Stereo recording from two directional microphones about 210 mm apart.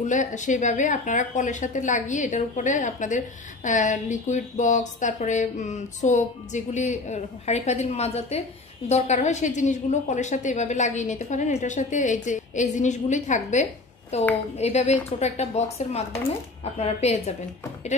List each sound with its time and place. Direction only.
0.0 s a woman's voice: 35° left (ahead or behind)